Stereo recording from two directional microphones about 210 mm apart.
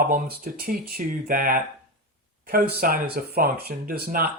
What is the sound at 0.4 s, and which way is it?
Speech, 45° right (ahead or behind).